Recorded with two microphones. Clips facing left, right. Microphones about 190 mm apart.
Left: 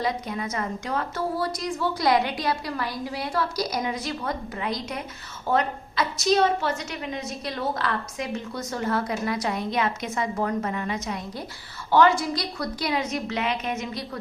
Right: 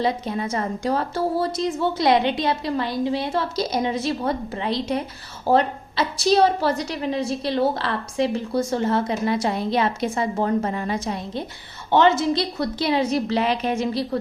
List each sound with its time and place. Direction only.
0.0 s a woman's voice: 30° right (ahead or behind)